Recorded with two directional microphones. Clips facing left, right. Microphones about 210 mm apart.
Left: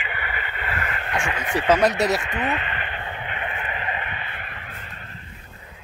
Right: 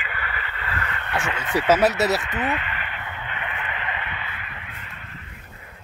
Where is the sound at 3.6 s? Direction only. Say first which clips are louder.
Left 2 dB; 40° left (ahead or behind).